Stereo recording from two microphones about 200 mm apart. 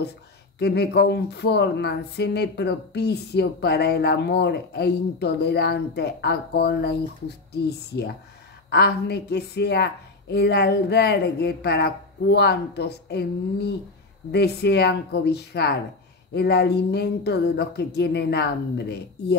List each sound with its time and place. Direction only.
0.6 s speech: 55° left (ahead or behind)